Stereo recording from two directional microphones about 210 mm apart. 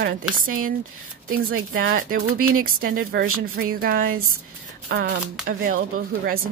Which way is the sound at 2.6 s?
45° right (ahead or behind).